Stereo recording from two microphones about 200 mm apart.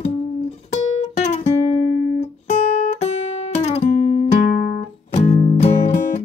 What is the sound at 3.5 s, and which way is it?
Guitar, 35° left (ahead or behind).